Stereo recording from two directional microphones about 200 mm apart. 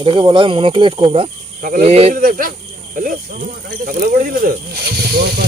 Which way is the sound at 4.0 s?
45° right (ahead or behind).